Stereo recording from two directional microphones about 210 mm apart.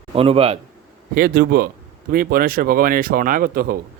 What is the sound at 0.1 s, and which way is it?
Speech, 25° right (ahead or behind).